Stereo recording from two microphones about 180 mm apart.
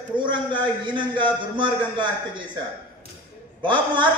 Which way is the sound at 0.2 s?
25° right (ahead or behind).